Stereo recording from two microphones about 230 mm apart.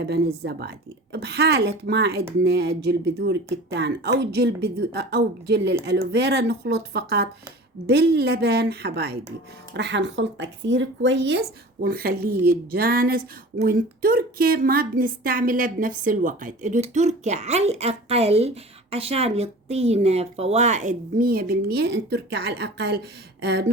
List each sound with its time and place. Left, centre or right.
1.1 s speech: right